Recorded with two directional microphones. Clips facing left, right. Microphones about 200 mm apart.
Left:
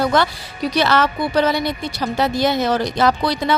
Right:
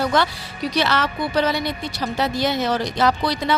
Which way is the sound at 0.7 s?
50° left (ahead or behind).